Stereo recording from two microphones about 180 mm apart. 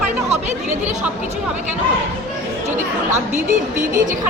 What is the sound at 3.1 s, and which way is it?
Speech, 40° right (ahead or behind).